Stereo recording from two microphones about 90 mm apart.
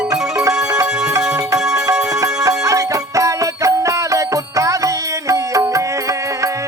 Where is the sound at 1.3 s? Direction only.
40° right (ahead or behind).